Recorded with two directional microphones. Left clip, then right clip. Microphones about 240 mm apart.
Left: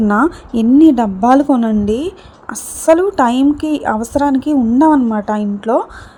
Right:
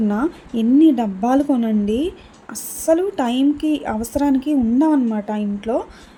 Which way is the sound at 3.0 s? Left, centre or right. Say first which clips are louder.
Left 7 dB; centre.